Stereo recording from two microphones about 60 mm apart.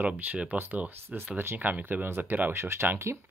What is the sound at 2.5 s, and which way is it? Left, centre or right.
Speech, right.